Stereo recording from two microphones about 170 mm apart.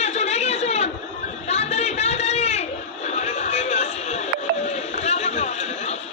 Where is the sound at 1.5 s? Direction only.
40° left (ahead or behind).